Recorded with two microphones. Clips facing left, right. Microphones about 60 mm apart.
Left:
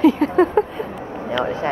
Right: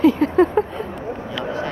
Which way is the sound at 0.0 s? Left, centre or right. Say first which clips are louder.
Even; centre.